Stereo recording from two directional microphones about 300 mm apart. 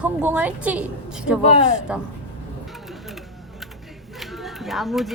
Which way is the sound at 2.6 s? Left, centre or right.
Centre.